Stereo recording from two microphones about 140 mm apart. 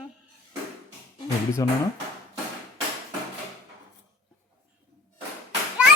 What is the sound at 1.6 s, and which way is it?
Speech, 25° left (ahead or behind).